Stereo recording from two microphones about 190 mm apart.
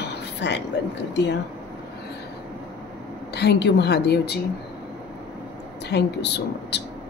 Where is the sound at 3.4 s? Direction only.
60° left (ahead or behind).